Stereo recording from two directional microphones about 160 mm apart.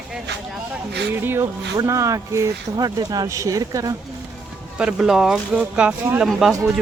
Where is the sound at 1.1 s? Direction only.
15° right (ahead or behind).